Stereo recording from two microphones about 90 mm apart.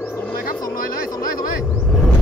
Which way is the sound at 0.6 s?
45° left (ahead or behind).